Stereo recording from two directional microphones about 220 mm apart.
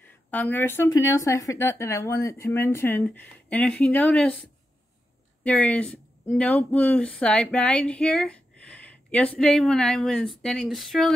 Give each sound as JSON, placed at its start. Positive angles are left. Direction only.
{"t": 0.0, "sound": "a woman's voice", "side_deg": 10}